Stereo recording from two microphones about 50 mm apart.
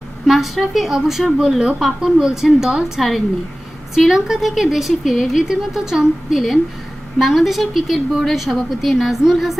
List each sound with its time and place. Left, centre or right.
0.3 s a woman's voice: centre